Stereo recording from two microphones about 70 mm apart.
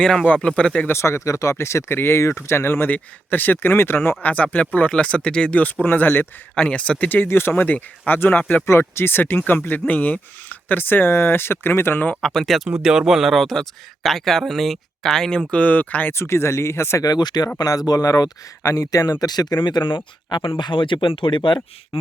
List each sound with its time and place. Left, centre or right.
0.0 s speech: centre
0.9 s speech: left
4.2 s speech: left
6.7 s speech: centre
8.6 s speech: left
12.2 s speech: centre
12.8 s speech: centre; by 16.1 s left
16.1 s speech: left
17.0 s speech: left
17.7 s speech: left
19.2 s speech: left
20.3 s speech: left